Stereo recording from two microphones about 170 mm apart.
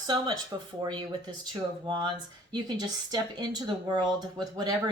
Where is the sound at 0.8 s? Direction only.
25° right (ahead or behind).